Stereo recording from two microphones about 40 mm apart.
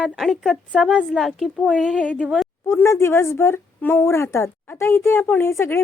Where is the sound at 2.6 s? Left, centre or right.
Left.